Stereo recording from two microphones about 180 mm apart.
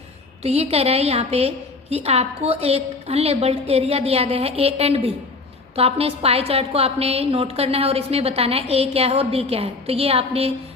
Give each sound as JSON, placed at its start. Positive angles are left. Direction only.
{"t": 0.4, "sound": "a woman's voice", "side_deg": -35}